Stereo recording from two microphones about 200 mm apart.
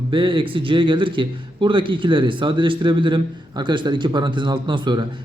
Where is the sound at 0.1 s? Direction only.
25° right (ahead or behind).